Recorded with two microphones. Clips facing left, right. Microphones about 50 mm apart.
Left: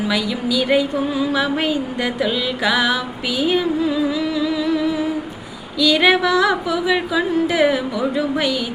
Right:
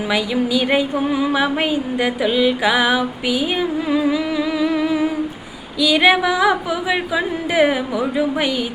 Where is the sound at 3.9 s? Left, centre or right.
Right.